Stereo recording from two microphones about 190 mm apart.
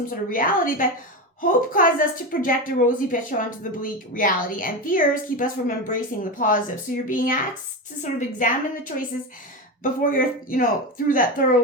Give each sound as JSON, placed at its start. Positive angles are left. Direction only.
{"t": 0.0, "sound": "a woman's voice", "side_deg": 45}